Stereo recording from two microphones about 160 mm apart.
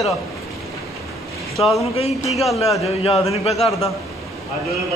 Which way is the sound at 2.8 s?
40° left (ahead or behind).